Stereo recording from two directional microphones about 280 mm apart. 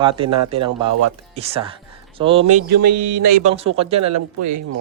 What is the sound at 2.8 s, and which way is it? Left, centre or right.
Music, right.